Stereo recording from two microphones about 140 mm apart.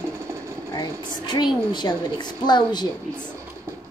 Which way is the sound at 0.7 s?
30° left (ahead or behind).